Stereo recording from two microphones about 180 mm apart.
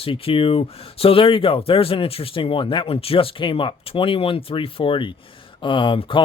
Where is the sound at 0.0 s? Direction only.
30° left (ahead or behind).